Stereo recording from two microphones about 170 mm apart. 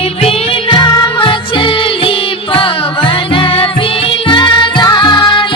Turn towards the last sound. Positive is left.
turn(degrees=30)  # may be behind; listen again after turning